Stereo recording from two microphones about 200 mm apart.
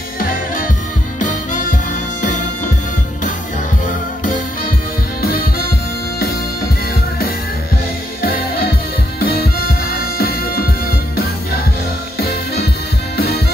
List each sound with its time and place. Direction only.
1.2 s music: 40° left (ahead or behind)
5.2 s music: 50° left (ahead or behind)
9.2 s music: 45° left (ahead or behind)